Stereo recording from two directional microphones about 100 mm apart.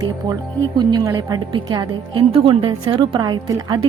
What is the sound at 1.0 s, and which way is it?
Speech, 35° right (ahead or behind).